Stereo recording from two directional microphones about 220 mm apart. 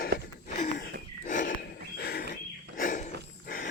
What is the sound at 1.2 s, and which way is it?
Horse, 35° left (ahead or behind).